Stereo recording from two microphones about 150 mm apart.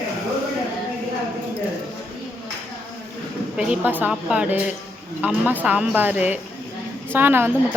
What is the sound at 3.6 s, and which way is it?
A woman's voice, 10° right (ahead or behind).